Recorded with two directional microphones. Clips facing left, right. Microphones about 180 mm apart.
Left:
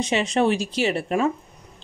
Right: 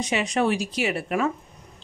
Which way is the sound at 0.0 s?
25° left (ahead or behind).